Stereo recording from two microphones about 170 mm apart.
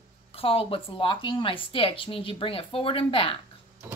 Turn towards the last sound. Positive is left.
turn(degrees=30)  # may be behind; listen again after turning